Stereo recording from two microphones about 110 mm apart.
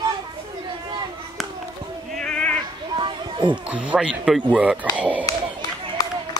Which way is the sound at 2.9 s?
45° right (ahead or behind).